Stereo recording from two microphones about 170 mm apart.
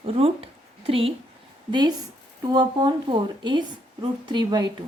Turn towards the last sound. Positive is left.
turn(degrees=-25)  # may be behind; listen again after turning